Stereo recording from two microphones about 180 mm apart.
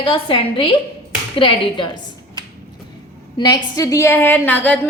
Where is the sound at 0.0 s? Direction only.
30° left (ahead or behind).